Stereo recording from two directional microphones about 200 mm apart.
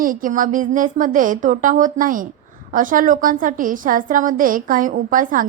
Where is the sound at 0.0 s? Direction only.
45° right (ahead or behind).